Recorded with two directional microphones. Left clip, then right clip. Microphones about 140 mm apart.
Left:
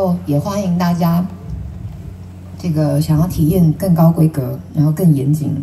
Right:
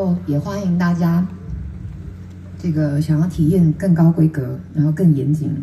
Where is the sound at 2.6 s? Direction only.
40° left (ahead or behind).